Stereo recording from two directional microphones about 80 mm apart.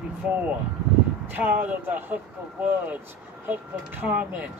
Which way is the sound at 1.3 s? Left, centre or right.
Right.